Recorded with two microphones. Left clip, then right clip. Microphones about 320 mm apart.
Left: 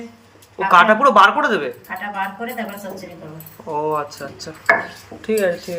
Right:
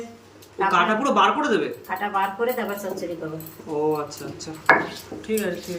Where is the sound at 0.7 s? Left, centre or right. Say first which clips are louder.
Left 10 dB; centre.